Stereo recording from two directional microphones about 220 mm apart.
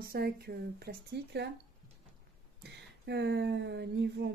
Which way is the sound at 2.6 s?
50° right (ahead or behind).